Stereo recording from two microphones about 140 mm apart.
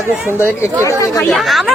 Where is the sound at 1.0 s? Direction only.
25° left (ahead or behind).